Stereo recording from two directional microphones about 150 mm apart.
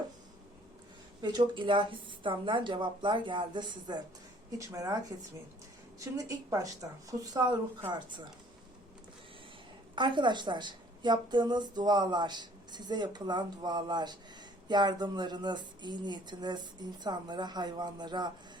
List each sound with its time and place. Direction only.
1.2 s a woman's voice: 30° right (ahead or behind)
9.9 s a woman's voice: 30° right (ahead or behind)